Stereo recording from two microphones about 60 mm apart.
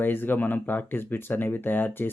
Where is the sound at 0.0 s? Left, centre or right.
Left.